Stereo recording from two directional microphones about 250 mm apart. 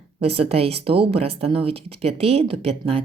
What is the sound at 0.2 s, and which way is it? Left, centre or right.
Speech, right.